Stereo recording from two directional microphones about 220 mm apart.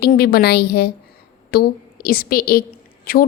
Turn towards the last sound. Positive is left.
turn(degrees=40)  # may be behind; listen again after turning